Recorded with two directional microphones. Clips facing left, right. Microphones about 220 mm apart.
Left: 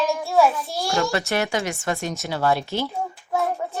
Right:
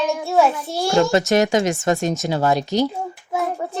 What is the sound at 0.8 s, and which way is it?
Speech, 30° right (ahead or behind).